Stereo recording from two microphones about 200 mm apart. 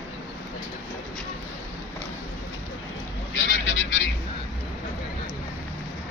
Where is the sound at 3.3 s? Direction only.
70° left (ahead or behind).